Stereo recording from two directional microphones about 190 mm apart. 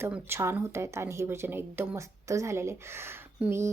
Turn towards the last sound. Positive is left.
turn(degrees=-15)  # may be behind; listen again after turning